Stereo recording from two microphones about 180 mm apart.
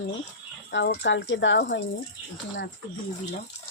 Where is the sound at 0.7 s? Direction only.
90° left.